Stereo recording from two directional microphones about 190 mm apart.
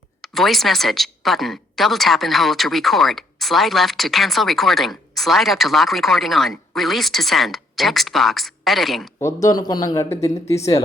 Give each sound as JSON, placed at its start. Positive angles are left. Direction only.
{"t": 0.2, "sound": "a woman's voice", "side_deg": 0}
{"t": 9.1, "sound": "speech", "side_deg": 15}